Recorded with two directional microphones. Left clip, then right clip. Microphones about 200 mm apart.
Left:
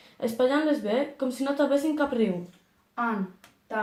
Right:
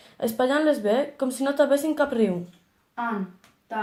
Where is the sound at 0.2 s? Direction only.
45° right (ahead or behind).